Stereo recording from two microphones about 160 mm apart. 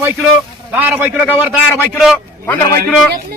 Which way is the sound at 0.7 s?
10° right (ahead or behind).